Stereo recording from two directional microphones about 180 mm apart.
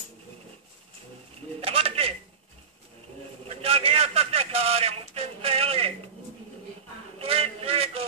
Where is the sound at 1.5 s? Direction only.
30° right (ahead or behind).